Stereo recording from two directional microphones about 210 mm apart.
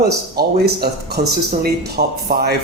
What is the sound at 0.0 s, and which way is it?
Speech, 50° right (ahead or behind).